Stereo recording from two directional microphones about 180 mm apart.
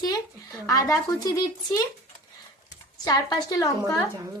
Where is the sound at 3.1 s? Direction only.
20° left (ahead or behind).